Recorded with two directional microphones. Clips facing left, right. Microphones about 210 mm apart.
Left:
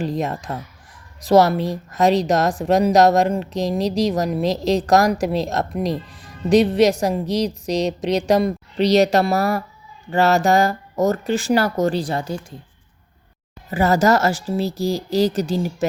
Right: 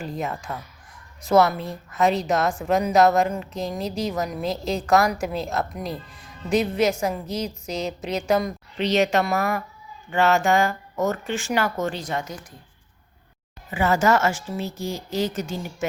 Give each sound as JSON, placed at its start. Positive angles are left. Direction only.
{"t": 0.2, "sound": "a woman's voice", "side_deg": 35}
{"t": 1.5, "sound": "a woman's voice", "side_deg": 90}
{"t": 1.9, "sound": "a woman's voice", "side_deg": 35}
{"t": 5.7, "sound": "a woman's voice", "side_deg": 90}
{"t": 6.5, "sound": "a woman's voice", "side_deg": 35}
{"t": 13.7, "sound": "a woman's voice", "side_deg": 40}